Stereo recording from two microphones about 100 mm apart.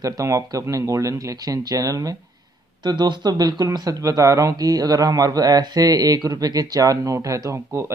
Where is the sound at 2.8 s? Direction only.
45° right (ahead or behind).